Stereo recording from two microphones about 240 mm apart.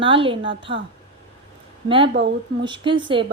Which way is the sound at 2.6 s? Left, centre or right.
Centre.